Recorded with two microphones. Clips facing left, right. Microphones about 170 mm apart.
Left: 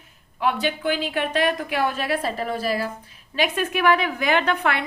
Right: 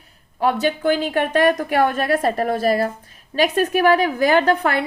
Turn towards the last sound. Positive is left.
turn(degrees=-40)  # may be behind; listen again after turning